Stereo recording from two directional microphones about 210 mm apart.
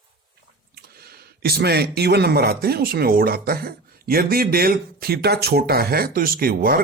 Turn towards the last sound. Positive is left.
turn(degrees=-45)  # may be behind; listen again after turning